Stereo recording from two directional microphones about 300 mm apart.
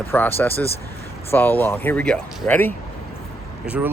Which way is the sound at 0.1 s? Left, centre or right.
Centre.